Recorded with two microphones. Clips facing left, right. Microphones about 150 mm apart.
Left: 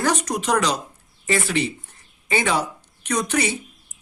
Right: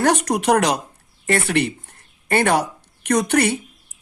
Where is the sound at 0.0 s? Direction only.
65° right (ahead or behind).